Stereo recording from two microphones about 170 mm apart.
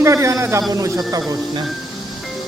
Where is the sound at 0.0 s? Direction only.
15° right (ahead or behind).